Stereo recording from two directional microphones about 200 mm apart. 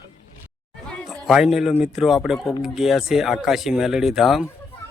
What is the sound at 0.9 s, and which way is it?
A man's voice, centre (ahead or behind).